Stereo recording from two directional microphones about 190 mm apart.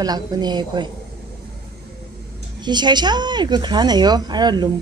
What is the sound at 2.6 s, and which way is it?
A woman's voice, 25° right (ahead or behind).